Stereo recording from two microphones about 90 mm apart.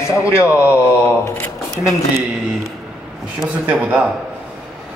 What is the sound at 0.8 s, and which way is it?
Speech, 30° left (ahead or behind).